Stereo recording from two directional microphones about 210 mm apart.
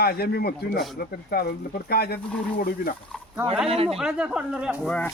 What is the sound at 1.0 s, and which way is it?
Speech, 45° left (ahead or behind).